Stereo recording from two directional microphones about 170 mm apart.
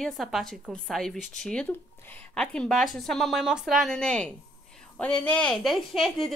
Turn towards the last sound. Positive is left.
turn(degrees=0)  # may be behind; listen again after turning